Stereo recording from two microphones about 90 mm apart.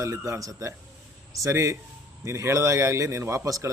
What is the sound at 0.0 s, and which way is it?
Speech, 35° right (ahead or behind).